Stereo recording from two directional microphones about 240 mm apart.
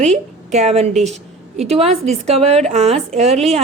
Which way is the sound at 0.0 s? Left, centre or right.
Right.